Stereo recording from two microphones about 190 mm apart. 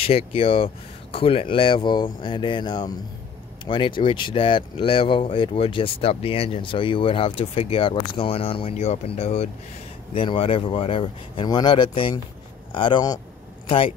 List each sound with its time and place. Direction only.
0.0 s speech: 30° left (ahead or behind)